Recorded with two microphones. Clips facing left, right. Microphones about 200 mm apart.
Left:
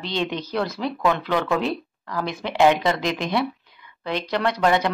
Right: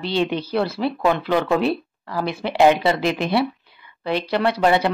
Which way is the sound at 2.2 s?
5° right (ahead or behind).